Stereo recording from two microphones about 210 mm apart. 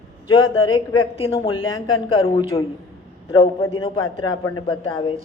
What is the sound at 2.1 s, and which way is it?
Speech, 20° left (ahead or behind).